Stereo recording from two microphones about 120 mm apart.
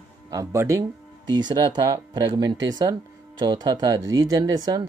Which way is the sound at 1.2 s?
35° right (ahead or behind).